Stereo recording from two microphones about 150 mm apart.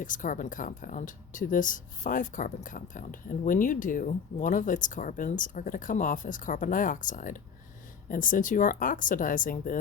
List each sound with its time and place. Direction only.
0.0 s speech: 60° left (ahead or behind)